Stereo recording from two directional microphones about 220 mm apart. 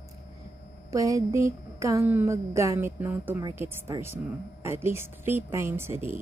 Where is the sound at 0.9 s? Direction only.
15° right (ahead or behind).